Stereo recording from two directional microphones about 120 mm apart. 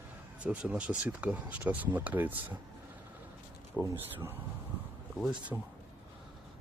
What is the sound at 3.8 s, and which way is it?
Speech, 25° right (ahead or behind).